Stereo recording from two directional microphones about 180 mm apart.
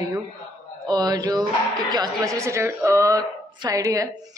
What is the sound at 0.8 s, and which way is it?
A woman's voice, 20° right (ahead or behind).